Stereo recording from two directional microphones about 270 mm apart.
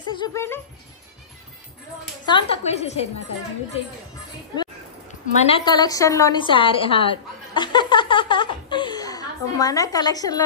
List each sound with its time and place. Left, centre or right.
0.1 s speech: centre
2.2 s a woman's voice: centre
5.4 s a woman's voice: centre